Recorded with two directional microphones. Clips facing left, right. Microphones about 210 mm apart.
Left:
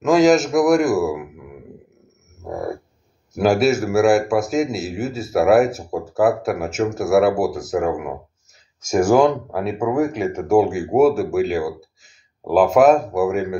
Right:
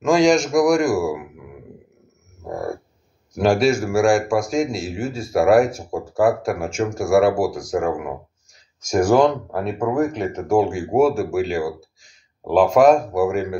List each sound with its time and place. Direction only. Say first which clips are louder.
0.0 s a man's voice: left 2 dB; 5° left (ahead or behind)
2.4 s a sound: left 1 dB; 5° left (ahead or behind)
3.3 s a man's voice: left 1 dB; 5° left (ahead or behind)